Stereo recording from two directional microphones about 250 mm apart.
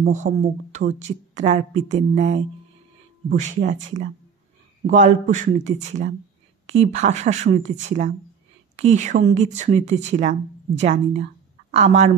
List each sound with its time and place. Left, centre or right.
0.0 s speech: right
4.8 s speech: right